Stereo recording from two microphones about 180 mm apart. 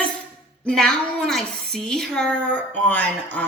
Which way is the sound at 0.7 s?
5° left (ahead or behind).